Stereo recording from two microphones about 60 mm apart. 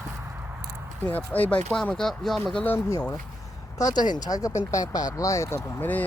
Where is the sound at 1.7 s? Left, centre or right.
Centre.